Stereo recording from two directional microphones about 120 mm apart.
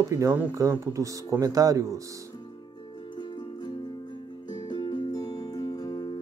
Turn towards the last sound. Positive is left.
turn(degrees=35)  # may be behind; listen again after turning